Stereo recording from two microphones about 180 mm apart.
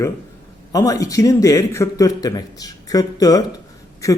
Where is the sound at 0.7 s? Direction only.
20° left (ahead or behind).